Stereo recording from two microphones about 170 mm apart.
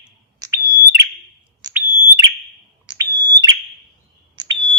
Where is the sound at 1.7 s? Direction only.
15° right (ahead or behind).